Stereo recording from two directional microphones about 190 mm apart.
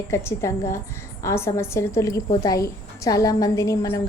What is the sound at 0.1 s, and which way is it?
A woman's voice, 15° left (ahead or behind).